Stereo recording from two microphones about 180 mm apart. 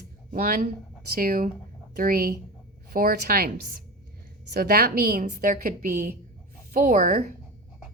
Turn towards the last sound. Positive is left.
turn(degrees=-50)  # may be behind; listen again after turning